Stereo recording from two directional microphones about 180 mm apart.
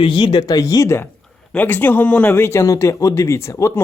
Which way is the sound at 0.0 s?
25° left (ahead or behind).